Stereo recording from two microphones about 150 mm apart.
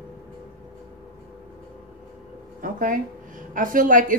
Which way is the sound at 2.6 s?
60° right (ahead or behind).